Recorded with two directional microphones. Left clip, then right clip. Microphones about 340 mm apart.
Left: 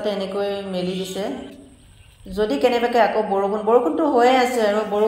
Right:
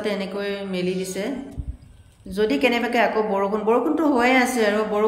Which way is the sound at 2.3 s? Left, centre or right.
Centre.